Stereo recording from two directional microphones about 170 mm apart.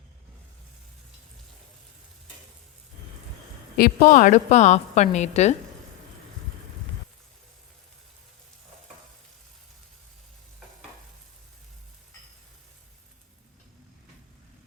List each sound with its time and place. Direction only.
3.8 s a woman's voice: 55° left (ahead or behind)